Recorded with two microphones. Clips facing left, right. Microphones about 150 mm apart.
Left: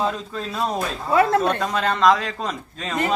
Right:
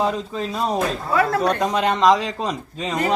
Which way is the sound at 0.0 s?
15° right (ahead or behind).